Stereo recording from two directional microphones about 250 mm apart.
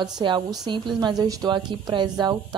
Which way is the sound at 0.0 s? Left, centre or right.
Centre.